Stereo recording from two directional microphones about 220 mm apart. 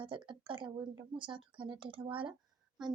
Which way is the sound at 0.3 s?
20° right (ahead or behind).